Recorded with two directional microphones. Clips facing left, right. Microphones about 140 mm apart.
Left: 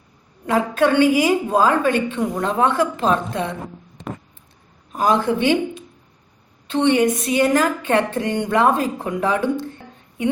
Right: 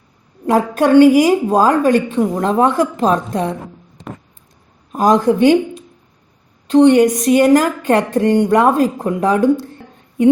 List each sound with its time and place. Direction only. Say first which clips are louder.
0.4 s a woman's voice: right 4 dB; 40° right (ahead or behind)
4.9 s a woman's voice: right 6 dB; 40° right (ahead or behind)